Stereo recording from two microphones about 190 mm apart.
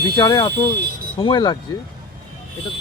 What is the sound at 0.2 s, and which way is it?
Speech, 20° left (ahead or behind).